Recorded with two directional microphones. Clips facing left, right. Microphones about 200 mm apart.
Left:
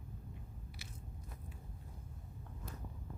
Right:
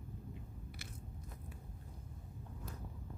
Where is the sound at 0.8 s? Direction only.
55° right (ahead or behind).